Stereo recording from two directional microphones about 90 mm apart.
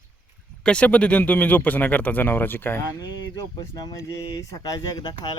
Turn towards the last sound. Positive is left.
turn(degrees=45)  # may be behind; listen again after turning